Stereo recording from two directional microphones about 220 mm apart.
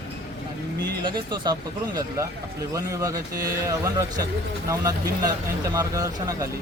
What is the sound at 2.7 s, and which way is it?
Speech, 15° right (ahead or behind).